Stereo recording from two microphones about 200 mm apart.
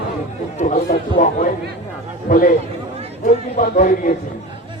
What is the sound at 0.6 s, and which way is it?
Speech, 35° left (ahead or behind).